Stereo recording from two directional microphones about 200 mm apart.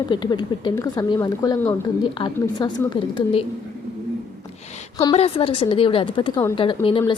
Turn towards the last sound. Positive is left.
turn(degrees=25)  # may be behind; listen again after turning